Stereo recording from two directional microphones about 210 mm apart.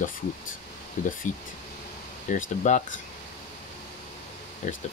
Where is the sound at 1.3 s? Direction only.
35° left (ahead or behind).